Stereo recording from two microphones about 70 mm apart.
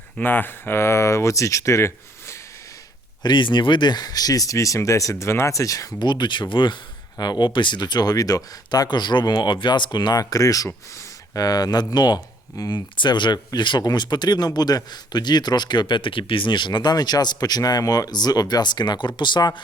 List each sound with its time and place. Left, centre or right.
0.2 s speech: left
3.2 s speech: left
6.0 s speech: left
8.7 s speech: left